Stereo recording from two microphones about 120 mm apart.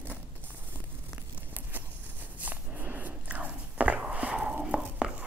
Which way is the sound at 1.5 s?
15° right (ahead or behind).